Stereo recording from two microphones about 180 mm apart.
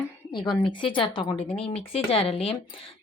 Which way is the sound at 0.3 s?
25° left (ahead or behind).